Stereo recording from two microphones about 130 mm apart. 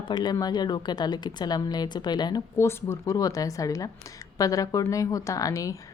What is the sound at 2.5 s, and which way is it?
Speech, 20° left (ahead or behind).